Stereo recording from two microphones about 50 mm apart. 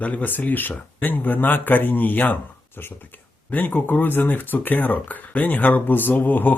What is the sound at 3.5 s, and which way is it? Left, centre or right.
Speech, left.